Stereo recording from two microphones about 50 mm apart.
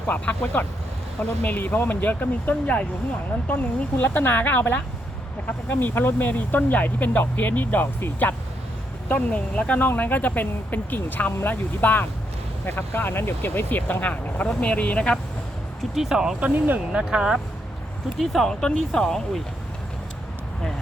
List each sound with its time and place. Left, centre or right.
0.1 s speech: left
5.8 s speech: left
9.0 s speech: left
16.0 s speech: centre
16.4 s speech: right
16.9 s speech: centre
18.2 s speech: centre
18.6 s speech: centre